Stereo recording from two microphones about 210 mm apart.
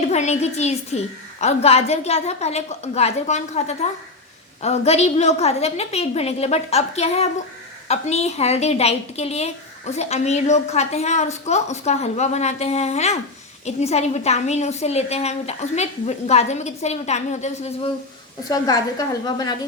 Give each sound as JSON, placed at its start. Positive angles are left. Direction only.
{"t": 0.1, "sound": "a woman's voice", "side_deg": 30}
{"t": 18.4, "sound": "a woman's voice", "side_deg": 15}